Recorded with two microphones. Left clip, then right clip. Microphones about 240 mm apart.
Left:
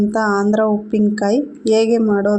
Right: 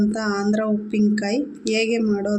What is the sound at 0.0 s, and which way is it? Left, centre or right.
Speech, left.